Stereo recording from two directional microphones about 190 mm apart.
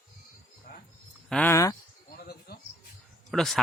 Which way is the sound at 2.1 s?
55° left (ahead or behind).